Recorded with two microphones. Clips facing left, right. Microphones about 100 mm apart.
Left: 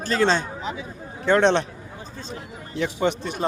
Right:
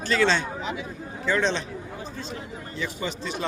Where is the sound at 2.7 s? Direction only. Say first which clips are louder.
Left 9 dB; 65° left (ahead or behind).